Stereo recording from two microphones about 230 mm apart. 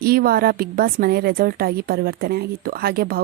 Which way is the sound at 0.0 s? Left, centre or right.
Right.